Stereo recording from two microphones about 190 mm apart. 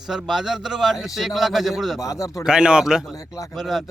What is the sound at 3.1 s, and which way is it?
Speech, 20° left (ahead or behind).